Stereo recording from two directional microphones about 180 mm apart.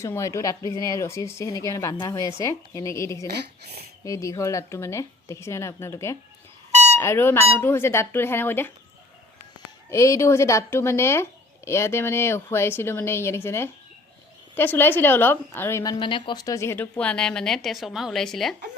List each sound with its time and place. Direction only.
0.0 s a woman's voice: 15° left (ahead or behind)
6.7 s a sound: 40° right (ahead or behind)
7.0 s a woman's voice: 15° left (ahead or behind)
9.9 s a woman's voice: 15° left (ahead or behind)